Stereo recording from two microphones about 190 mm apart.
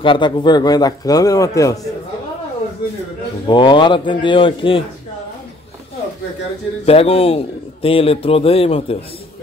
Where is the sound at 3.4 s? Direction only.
25° left (ahead or behind).